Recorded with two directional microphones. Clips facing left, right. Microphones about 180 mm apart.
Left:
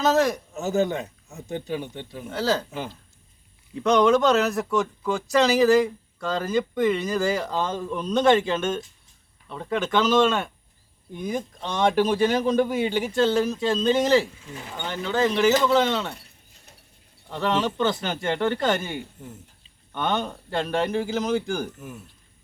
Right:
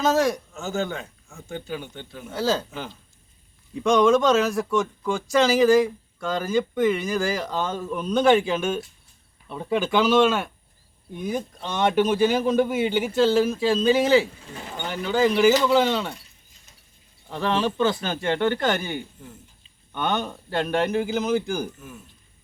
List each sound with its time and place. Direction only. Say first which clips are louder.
0.0 s a man's voice: even; centre (ahead or behind)
0.5 s speech: left 4 dB; 20° left (ahead or behind)
2.7 s a man's voice: left 2 dB; 5° left (ahead or behind)
16.1 s a sound: left 1 dB; 60° left (ahead or behind)
17.2 s a man's voice: even; 10° right (ahead or behind)